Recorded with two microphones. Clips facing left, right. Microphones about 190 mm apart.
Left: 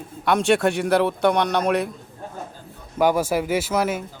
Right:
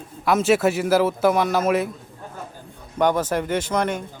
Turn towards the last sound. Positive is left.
turn(degrees=5)  # may be behind; listen again after turning